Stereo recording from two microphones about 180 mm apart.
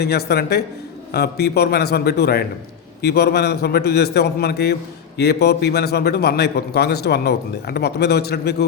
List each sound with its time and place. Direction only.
0.0 s a man's voice: 60° left (ahead or behind)